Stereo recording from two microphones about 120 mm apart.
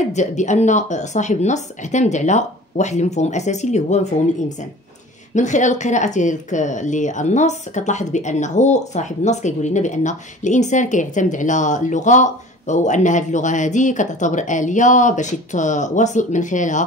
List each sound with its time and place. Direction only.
0.1 s speech: 80° left
5.3 s speech: 90° left